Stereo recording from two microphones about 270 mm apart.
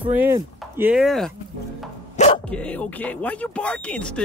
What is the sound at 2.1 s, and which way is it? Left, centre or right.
Dog, left.